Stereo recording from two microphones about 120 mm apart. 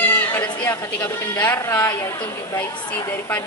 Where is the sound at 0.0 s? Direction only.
15° left (ahead or behind).